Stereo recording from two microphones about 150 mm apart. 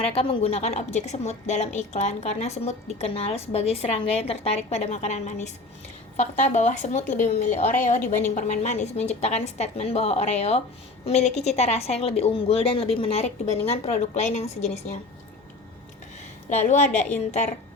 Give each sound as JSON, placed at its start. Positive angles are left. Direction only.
{"t": 0.0, "sound": "a woman's voice", "side_deg": 40}
{"t": 16.6, "sound": "a woman's voice", "side_deg": 50}